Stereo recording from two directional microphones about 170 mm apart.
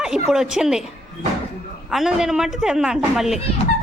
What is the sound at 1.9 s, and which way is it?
A woman's voice, 5° right (ahead or behind).